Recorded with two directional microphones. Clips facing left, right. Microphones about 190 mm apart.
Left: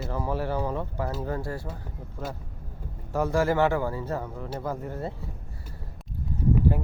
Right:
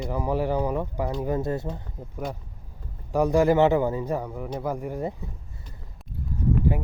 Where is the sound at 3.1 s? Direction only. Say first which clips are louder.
Right 4 dB; 15° right (ahead or behind).